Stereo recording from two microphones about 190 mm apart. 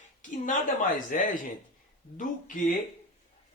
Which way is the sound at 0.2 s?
40° left (ahead or behind).